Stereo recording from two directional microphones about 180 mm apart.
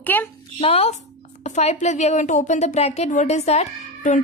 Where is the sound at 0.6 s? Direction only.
35° left (ahead or behind).